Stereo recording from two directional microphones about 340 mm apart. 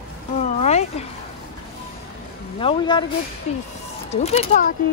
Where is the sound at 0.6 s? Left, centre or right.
Centre.